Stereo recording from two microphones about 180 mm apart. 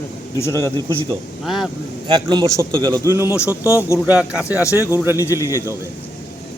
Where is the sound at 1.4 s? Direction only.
Centre (ahead or behind).